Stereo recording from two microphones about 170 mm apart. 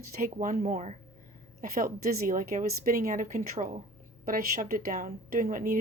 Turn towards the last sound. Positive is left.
turn(degrees=-55)  # may be behind; listen again after turning